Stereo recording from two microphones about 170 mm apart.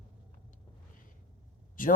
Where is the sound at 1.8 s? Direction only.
55° left (ahead or behind).